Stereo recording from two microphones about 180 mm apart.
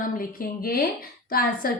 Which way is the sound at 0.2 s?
55° left (ahead or behind).